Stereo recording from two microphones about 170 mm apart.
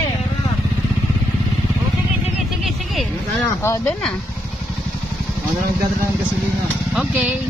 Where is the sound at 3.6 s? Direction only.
15° left (ahead or behind).